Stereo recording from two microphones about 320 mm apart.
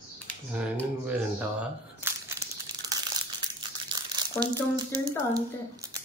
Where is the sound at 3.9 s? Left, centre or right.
Centre.